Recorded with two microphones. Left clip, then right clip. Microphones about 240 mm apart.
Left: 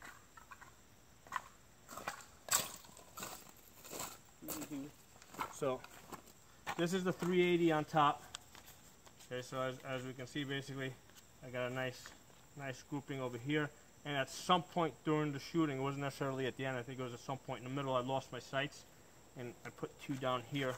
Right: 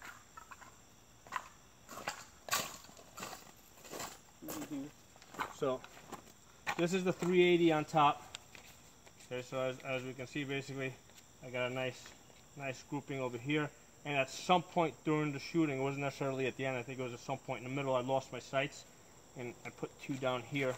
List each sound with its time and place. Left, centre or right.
1.9 s horse: centre
3.9 s roaring cats: centre
5.3 s a sound: centre
9.3 s speech: centre